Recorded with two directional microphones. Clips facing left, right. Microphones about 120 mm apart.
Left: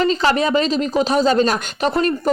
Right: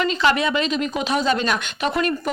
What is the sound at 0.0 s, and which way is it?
Speech, 35° left (ahead or behind).